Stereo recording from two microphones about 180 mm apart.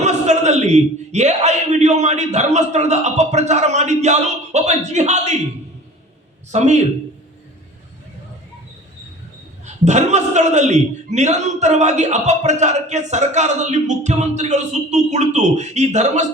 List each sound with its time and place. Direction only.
0.0 s a man's voice: 40° right (ahead or behind)
6.5 s a man's voice: 40° right (ahead or behind)
9.6 s a man's voice: 40° right (ahead or behind)